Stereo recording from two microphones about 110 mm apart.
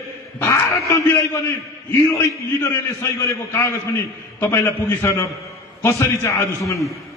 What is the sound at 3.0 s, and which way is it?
A man's voice, 25° left (ahead or behind).